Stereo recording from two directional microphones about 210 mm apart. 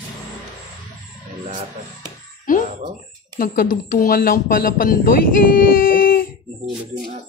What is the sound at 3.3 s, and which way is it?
Speech, 45° left (ahead or behind).